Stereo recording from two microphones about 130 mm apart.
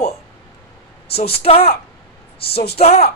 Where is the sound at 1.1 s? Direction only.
50° left (ahead or behind).